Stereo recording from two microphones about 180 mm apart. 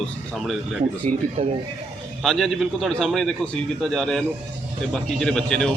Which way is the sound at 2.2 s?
Centre (ahead or behind).